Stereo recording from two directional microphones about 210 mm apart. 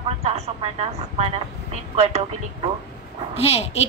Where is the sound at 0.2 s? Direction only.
30° right (ahead or behind).